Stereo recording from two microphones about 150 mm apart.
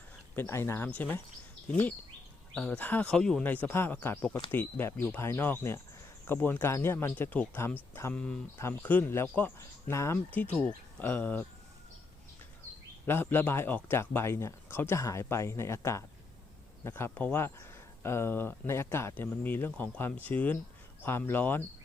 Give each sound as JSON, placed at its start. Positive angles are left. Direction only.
{"t": 0.3, "sound": "speech", "side_deg": 15}
{"t": 13.1, "sound": "speech", "side_deg": 15}